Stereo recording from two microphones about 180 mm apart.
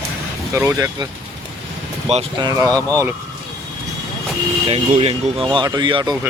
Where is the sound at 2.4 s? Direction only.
20° right (ahead or behind).